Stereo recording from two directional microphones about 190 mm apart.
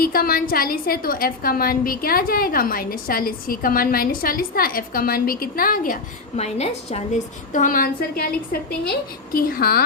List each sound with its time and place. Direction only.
0.0 s a woman's voice: 50° left (ahead or behind); by 7.0 s 35° left (ahead or behind)
7.5 s a woman's voice: 45° left (ahead or behind)